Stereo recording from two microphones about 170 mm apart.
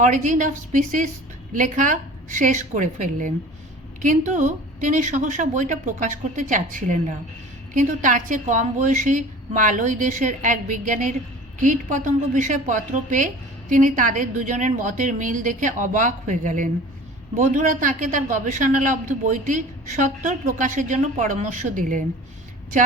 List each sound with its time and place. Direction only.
0.0 s a woman's voice: 50° right (ahead or behind)